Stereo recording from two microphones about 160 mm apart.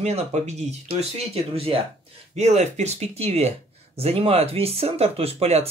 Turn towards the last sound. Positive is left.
turn(degrees=-40)  # may be behind; listen again after turning